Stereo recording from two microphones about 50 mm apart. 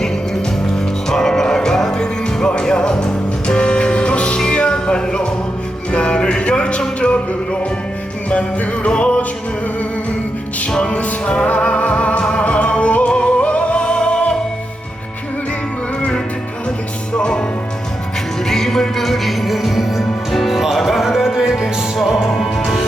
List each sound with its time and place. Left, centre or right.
1.1 s music: centre
8.3 s music: left
10.7 s music: centre
16.0 s music: centre
18.4 s music: centre
21.9 s music: centre